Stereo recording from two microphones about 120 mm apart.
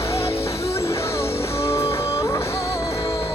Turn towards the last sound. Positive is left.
turn(degrees=35)  # may be behind; listen again after turning